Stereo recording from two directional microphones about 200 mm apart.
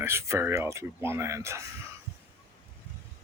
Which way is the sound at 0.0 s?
10° right (ahead or behind).